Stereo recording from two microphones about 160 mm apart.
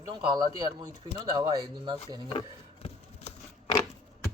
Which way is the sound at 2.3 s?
35° left (ahead or behind).